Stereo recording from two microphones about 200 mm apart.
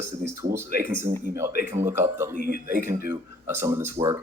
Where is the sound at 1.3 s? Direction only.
15° right (ahead or behind).